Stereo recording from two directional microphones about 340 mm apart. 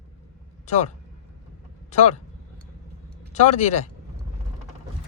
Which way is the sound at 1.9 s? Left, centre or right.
Left.